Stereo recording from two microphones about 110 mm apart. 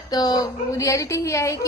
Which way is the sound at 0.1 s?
35° left (ahead or behind).